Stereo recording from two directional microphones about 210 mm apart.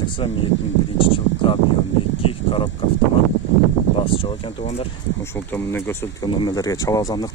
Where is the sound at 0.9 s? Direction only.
25° left (ahead or behind).